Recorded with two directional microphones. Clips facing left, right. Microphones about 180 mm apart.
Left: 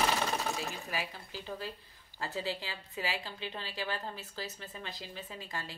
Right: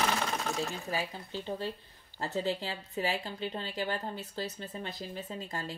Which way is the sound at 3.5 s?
30° right (ahead or behind).